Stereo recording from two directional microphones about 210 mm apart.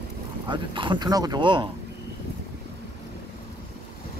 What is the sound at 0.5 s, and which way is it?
Speech, 25° right (ahead or behind).